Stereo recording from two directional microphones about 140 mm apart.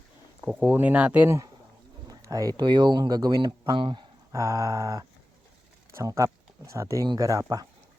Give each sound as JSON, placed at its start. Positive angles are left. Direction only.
{"t": 0.4, "sound": "speech", "side_deg": -10}
{"t": 2.0, "sound": "speech", "side_deg": -25}
{"t": 4.3, "sound": "speech", "side_deg": -20}